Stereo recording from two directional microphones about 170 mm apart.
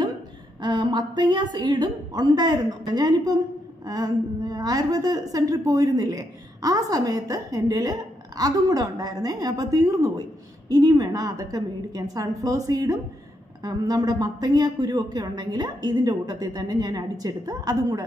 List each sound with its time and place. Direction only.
0.6 s a woman's voice: 25° right (ahead or behind)